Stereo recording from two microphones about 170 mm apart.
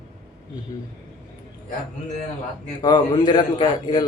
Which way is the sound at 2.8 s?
25° left (ahead or behind).